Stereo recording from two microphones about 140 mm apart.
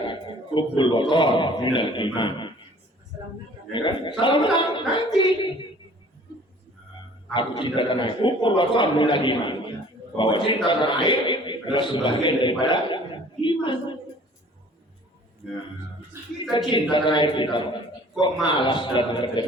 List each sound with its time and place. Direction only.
0.1 s a sound: 35° left (ahead or behind)
1.1 s a man's voice: 35° left (ahead or behind)
3.7 s a man's voice: 35° left (ahead or behind)
7.3 s a man's voice: 35° left (ahead or behind)
13.4 s a sound: 35° left (ahead or behind)
16.5 s a man's voice: 35° left (ahead or behind)